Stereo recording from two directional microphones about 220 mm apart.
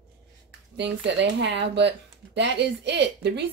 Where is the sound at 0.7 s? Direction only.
50° right (ahead or behind).